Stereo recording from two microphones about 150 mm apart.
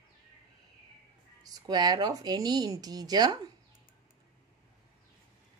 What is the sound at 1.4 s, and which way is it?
A woman's voice, 25° right (ahead or behind).